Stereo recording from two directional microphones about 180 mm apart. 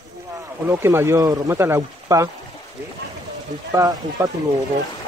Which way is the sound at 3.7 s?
20° right (ahead or behind).